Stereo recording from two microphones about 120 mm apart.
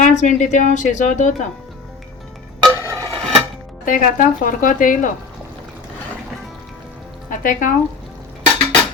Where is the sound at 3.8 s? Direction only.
90° left.